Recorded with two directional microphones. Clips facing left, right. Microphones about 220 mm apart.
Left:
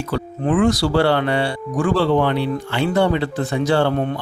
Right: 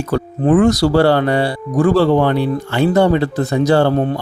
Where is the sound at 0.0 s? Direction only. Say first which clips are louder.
Right 5 dB; 45° right (ahead or behind).